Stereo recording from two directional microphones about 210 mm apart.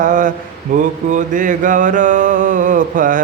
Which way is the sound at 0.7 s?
40° right (ahead or behind).